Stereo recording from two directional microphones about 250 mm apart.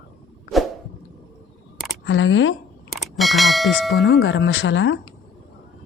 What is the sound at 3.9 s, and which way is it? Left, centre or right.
Speech, left.